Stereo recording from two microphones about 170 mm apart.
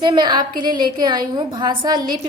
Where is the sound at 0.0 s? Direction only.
30° right (ahead or behind).